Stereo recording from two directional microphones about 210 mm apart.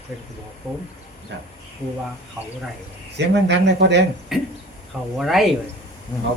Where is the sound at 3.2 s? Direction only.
55° right (ahead or behind).